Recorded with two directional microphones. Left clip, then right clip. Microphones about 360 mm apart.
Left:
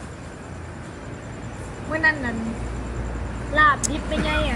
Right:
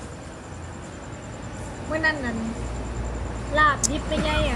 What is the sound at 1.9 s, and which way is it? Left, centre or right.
Speech, centre.